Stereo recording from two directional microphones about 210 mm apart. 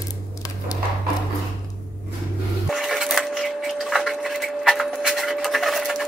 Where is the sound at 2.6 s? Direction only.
Centre (ahead or behind).